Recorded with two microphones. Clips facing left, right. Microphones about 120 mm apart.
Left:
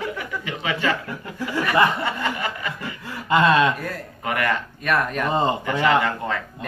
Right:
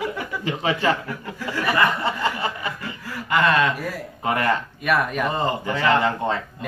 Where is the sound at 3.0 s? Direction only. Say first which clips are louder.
Left 2 dB; 25° left (ahead or behind).